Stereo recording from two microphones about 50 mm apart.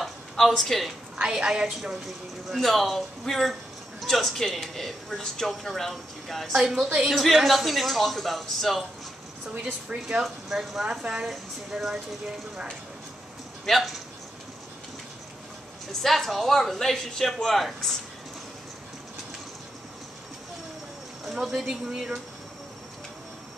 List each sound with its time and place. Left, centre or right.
0.5 s speech: centre
1.2 s a woman's voice: centre
2.5 s speech: centre
6.5 s a woman's voice: centre
9.5 s a woman's voice: right
10.0 s speech: centre
13.7 s speech: centre
16.0 s speech: centre
21.3 s speech: centre